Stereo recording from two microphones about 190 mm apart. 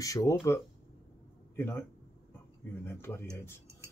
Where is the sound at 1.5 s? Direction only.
10° left (ahead or behind).